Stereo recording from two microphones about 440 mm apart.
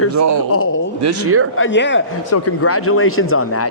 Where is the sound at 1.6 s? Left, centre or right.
Left.